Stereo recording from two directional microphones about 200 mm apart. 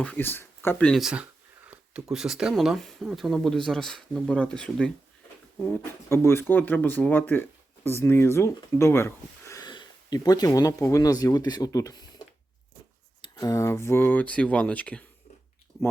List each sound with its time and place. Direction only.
0.0 s speech: 10° left (ahead or behind)
13.2 s speech: 15° left (ahead or behind)